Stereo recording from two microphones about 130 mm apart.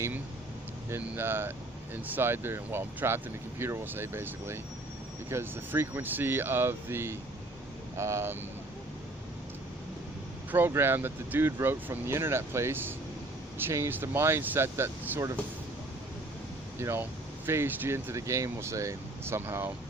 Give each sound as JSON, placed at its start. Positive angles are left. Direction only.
{"t": 0.9, "sound": "speech", "side_deg": -20}
{"t": 10.5, "sound": "speech", "side_deg": -15}
{"t": 16.8, "sound": "speech", "side_deg": -20}